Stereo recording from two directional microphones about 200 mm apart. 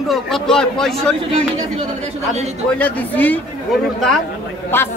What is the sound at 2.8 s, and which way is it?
A man's voice, 10° left (ahead or behind).